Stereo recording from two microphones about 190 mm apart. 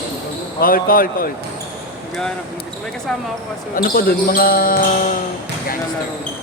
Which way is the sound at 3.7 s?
50° left (ahead or behind).